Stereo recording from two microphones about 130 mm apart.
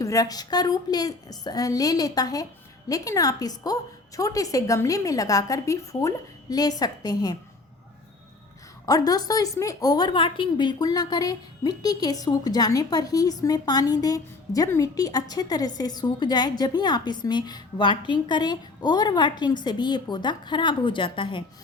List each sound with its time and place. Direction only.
0.0 s a woman's voice: 25° left (ahead or behind)
8.9 s a woman's voice: 30° left (ahead or behind)